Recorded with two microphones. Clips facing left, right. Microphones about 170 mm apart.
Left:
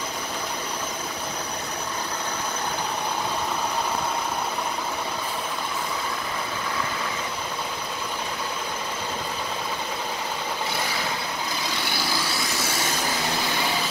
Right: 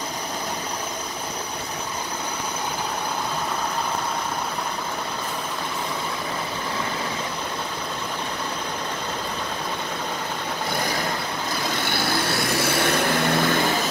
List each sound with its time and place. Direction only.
11.9 s vehicle: 55° right (ahead or behind)